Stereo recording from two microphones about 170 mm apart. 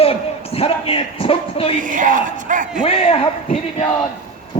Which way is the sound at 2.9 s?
35° left (ahead or behind).